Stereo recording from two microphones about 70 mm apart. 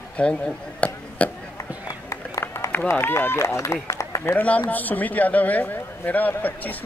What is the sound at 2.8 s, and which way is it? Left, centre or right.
A man's voice, left.